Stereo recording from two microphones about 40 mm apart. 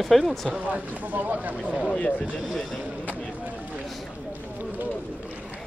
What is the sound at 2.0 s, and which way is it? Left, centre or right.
Speech, left.